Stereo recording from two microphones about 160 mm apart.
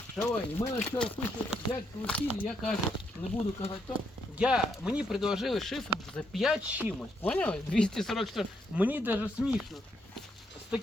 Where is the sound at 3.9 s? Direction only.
5° right (ahead or behind).